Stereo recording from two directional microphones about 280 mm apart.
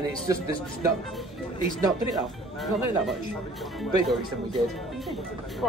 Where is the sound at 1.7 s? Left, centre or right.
Centre.